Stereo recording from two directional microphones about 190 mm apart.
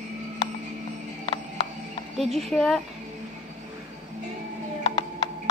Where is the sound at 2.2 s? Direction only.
Centre (ahead or behind).